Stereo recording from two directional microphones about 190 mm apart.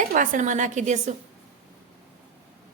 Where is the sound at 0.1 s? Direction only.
45° right (ahead or behind).